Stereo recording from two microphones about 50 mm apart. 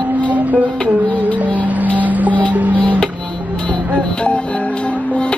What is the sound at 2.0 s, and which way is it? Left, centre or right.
Music, right.